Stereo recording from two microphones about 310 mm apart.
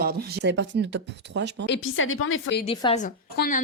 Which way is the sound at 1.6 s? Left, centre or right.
Left.